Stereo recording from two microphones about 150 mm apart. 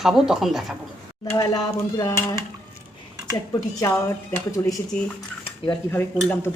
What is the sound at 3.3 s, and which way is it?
Speech, 20° left (ahead or behind).